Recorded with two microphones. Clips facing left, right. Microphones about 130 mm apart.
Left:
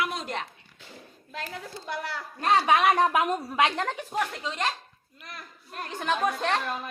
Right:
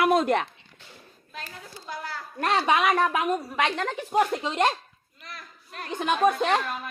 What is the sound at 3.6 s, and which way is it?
Speech, 15° left (ahead or behind).